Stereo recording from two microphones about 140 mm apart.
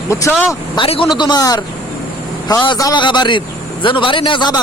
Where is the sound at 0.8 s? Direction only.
40° left (ahead or behind).